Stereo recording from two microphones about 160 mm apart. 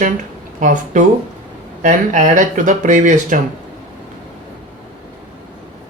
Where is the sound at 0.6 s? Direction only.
50° right (ahead or behind).